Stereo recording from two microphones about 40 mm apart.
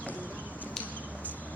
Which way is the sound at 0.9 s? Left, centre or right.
Left.